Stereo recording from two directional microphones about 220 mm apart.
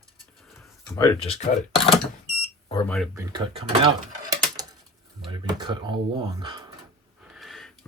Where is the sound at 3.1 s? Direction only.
20° right (ahead or behind).